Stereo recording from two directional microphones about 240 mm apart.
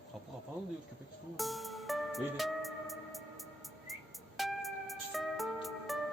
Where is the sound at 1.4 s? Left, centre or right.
Centre.